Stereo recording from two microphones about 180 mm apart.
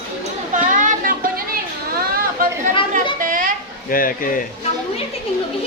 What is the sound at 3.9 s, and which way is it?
Speech, 50° left (ahead or behind).